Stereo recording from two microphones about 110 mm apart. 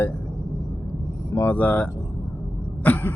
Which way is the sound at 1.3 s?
25° left (ahead or behind).